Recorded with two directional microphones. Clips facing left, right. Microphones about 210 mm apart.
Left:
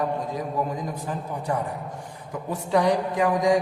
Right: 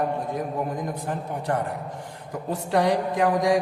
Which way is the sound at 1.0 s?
70° right (ahead or behind).